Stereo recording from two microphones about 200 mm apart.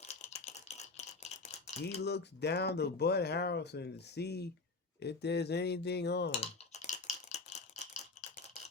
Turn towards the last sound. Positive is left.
turn(degrees=35)  # may be behind; listen again after turning